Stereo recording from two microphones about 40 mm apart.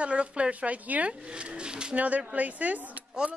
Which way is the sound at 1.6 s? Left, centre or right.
Right.